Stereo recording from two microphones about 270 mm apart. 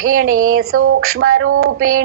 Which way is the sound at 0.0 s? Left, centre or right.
Right.